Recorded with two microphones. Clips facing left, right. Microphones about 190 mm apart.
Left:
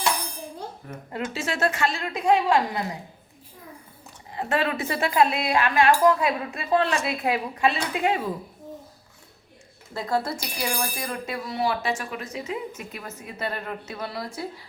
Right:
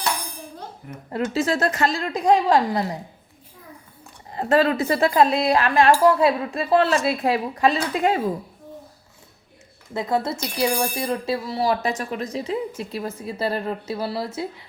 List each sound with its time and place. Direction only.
1.1 s speech: 35° right (ahead or behind)
4.3 s speech: 40° right (ahead or behind)
9.9 s speech: 20° right (ahead or behind)